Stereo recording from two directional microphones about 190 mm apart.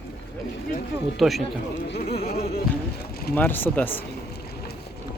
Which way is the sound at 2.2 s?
35° left (ahead or behind).